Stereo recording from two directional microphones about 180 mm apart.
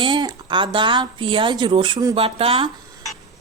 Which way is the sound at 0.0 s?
25° right (ahead or behind).